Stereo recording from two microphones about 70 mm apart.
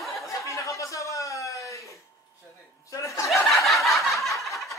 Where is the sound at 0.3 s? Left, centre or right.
Left.